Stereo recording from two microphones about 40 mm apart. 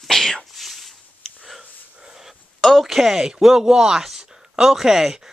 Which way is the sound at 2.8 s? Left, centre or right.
Centre.